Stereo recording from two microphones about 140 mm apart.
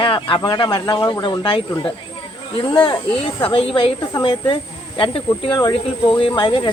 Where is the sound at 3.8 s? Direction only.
35° left (ahead or behind).